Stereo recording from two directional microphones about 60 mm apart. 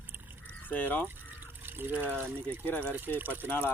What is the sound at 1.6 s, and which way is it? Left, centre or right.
Speech, right.